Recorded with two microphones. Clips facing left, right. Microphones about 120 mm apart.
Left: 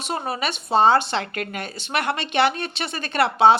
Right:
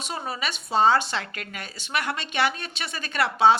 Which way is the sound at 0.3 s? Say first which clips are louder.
Left 5 dB; 55° left (ahead or behind).